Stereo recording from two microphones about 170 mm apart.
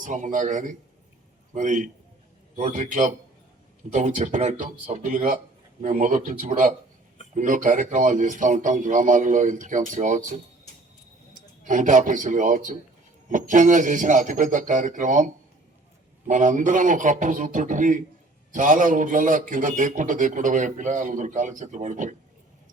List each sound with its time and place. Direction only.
0.0 s a man's voice: 45° right (ahead or behind)
11.3 s a man's voice: 50° right (ahead or behind)